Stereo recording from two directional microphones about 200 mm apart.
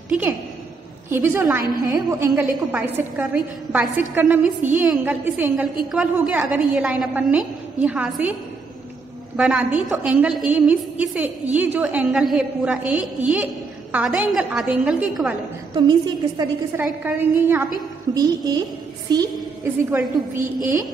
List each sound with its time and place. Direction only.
0.1 s a woman's voice: 5° right (ahead or behind)
9.4 s a woman's voice: 5° right (ahead or behind)
15.7 s a woman's voice: 20° right (ahead or behind)
16.8 s a woman's voice: 10° right (ahead or behind)